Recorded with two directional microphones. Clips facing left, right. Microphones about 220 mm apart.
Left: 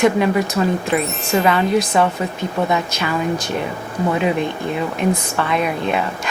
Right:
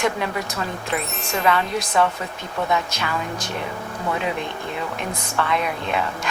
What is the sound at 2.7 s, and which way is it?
Speech, 10° left (ahead or behind).